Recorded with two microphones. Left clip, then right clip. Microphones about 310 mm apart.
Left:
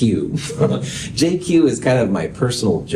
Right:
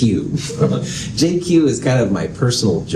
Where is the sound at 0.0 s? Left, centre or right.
Left.